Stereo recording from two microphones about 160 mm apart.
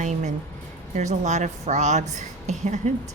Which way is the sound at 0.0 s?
45° right (ahead or behind).